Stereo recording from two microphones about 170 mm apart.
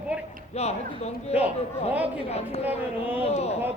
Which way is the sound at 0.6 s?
40° left (ahead or behind).